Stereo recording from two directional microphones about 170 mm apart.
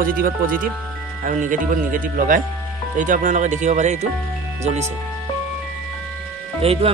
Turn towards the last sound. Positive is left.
turn(degrees=-35)  # may be behind; listen again after turning